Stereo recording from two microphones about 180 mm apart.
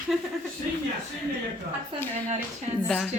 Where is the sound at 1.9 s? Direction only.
30° right (ahead or behind).